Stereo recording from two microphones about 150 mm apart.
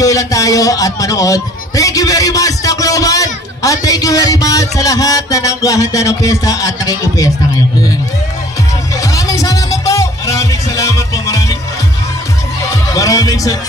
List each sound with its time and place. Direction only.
0.0 s speech: 25° left (ahead or behind)
9.0 s music: 20° left (ahead or behind)
12.9 s speech: 25° left (ahead or behind)